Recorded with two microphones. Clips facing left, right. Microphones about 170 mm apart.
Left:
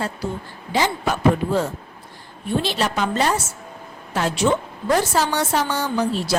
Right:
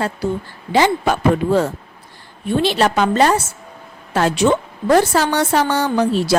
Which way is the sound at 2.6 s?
70° right (ahead or behind).